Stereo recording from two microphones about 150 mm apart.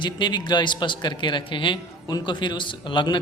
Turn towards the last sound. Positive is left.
turn(degrees=30)  # may be behind; listen again after turning